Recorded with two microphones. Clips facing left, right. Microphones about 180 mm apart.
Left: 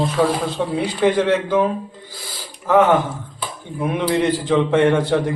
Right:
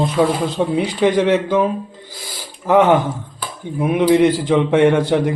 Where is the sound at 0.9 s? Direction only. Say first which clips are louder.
Right 1 dB; 20° right (ahead or behind).